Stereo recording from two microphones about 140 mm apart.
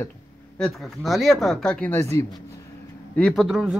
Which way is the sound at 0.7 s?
Centre (ahead or behind).